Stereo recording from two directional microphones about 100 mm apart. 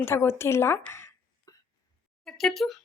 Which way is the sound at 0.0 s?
25° left (ahead or behind).